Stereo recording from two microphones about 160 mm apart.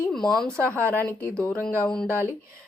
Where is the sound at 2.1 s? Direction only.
15° right (ahead or behind).